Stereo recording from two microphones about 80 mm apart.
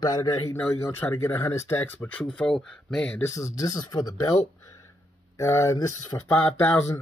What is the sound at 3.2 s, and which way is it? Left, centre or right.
Speech, left.